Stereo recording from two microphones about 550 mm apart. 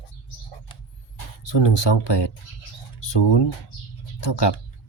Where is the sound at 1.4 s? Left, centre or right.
Left.